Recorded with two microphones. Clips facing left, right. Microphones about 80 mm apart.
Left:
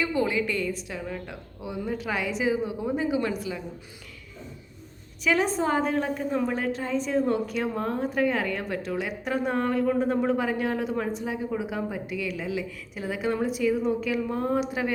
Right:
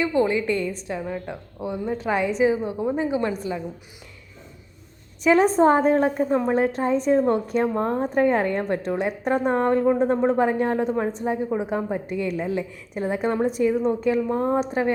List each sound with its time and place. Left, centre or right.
0.0 s a woman's voice: right
5.2 s a woman's voice: right
7.7 s a woman's voice: right